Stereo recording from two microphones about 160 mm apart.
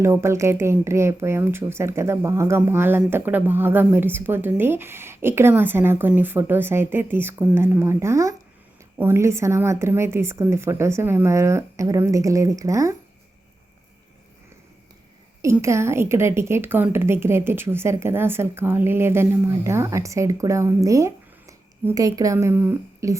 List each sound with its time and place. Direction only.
0.0 s speech: 15° right (ahead or behind)
15.4 s speech: 20° right (ahead or behind)